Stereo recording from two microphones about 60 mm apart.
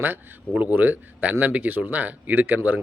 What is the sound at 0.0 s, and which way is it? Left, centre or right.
Speech, right.